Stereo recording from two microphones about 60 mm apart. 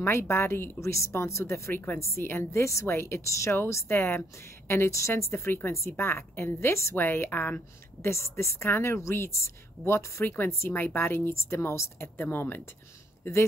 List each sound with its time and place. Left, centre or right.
0.0 s speech: left
1.7 s speech: left
2.0 s a woman's voice: left
7.0 s speech: left
8.0 s speech: left
10.2 s speech: left
12.2 s speech: left
13.2 s speech: left